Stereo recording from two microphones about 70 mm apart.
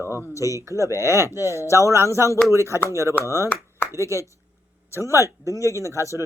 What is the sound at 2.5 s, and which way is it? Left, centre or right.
Speech, right.